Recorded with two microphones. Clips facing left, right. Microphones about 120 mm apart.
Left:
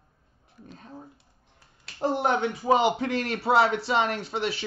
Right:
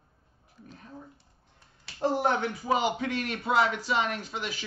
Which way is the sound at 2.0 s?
20° left (ahead or behind).